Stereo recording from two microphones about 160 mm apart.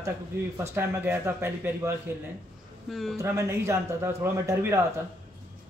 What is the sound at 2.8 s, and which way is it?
Speech, centre (ahead or behind).